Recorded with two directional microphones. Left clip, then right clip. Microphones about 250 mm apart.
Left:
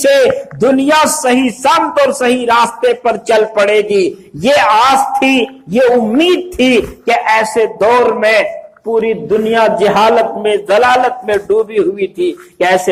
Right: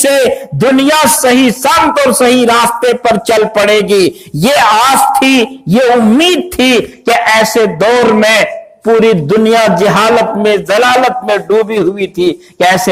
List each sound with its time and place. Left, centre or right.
0.8 s a man's voice: right